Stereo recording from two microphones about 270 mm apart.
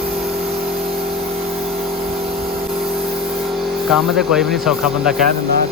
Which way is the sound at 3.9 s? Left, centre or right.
Centre.